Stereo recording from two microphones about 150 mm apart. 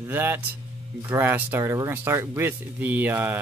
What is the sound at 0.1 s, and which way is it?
Speech, 15° right (ahead or behind).